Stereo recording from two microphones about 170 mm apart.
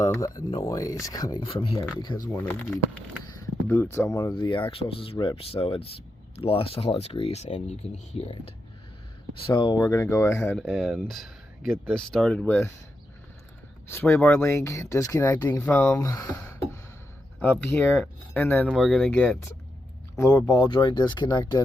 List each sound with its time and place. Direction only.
0.0 s speech: 20° left (ahead or behind)
2.3 s speech: 10° left (ahead or behind)
10.6 s speech: 5° right (ahead or behind); by 12.7 s 15° left (ahead or behind)
13.8 s speech: 15° left (ahead or behind)
18.7 s speech: centre (ahead or behind)
20.1 s speech: 20° left (ahead or behind)